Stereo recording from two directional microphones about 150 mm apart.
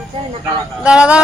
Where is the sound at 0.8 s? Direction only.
5° right (ahead or behind).